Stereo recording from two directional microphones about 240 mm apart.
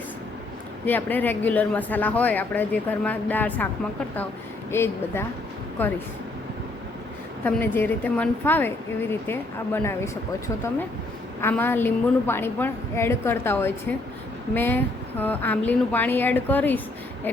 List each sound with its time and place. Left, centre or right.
0.9 s a woman's voice: centre
4.7 s a woman's voice: centre
7.4 s a woman's voice: centre